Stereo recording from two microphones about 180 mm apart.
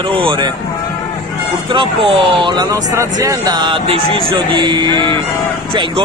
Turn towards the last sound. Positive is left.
turn(degrees=-25)  # may be behind; listen again after turning